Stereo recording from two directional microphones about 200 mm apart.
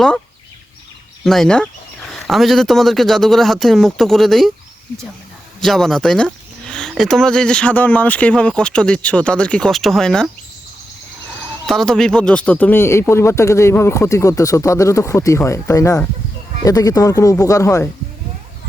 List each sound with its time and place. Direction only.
1.2 s speech: centre (ahead or behind)
5.5 s speech: centre (ahead or behind)
11.6 s speech: centre (ahead or behind)